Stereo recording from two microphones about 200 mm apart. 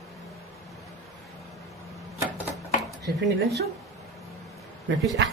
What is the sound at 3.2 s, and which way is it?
Speech, 60° right (ahead or behind).